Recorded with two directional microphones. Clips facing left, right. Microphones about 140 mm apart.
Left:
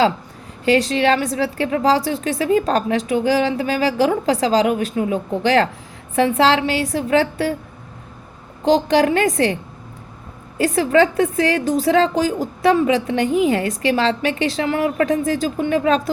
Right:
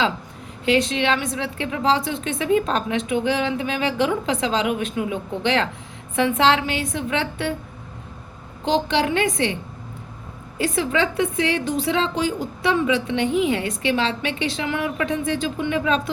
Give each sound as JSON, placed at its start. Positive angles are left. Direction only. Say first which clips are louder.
{"t": 0.6, "sound": "a woman's voice", "louder": "left 4 dB", "side_deg": 35}
{"t": 8.6, "sound": "a woman's voice", "louder": "left 6 dB", "side_deg": 40}
{"t": 10.6, "sound": "a woman's voice", "louder": "left 6 dB", "side_deg": 40}